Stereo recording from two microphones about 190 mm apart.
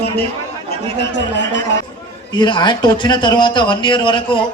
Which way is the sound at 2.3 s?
25° left (ahead or behind).